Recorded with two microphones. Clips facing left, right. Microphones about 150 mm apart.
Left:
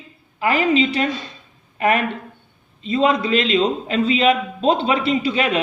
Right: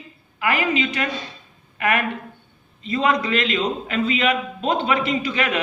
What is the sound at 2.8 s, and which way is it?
Speech, 25° left (ahead or behind).